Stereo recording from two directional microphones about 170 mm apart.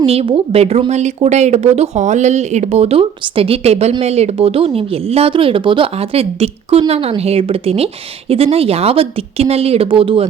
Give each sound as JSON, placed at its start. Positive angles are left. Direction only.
{"t": 0.0, "sound": "speech", "side_deg": -35}